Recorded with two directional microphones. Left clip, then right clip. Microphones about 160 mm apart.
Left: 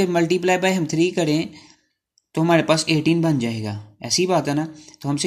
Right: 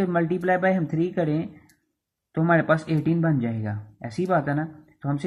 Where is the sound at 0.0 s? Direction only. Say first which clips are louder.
Left 5 dB; 30° left (ahead or behind).